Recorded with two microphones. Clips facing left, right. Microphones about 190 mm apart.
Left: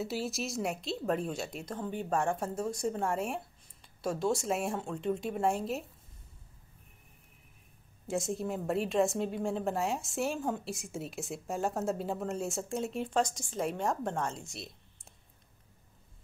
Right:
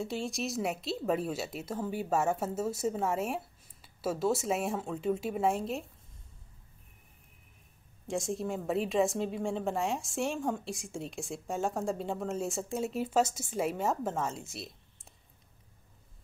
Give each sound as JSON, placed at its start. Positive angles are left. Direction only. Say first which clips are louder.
{"t": 0.0, "sound": "a woman's voice", "louder": "even", "side_deg": 5}
{"t": 8.1, "sound": "a woman's voice", "louder": "even", "side_deg": 0}